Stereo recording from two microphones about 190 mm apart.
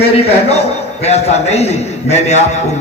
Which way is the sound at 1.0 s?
35° left (ahead or behind).